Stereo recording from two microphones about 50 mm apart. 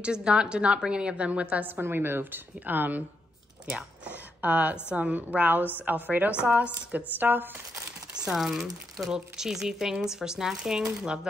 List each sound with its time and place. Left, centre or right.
0.0 s a woman's voice: centre
1.8 s a woman's voice: right
3.6 s a woman's voice: right
7.2 s a woman's voice: right
8.1 s speech: centre